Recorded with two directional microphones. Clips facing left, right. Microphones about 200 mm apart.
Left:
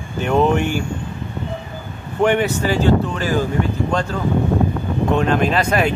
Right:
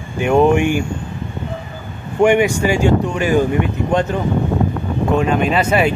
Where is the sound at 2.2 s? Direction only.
10° right (ahead or behind).